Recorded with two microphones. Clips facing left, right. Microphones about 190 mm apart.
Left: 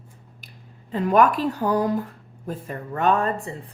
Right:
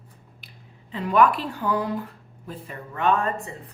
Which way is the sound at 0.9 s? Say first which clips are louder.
Left 2 dB; 45° left (ahead or behind).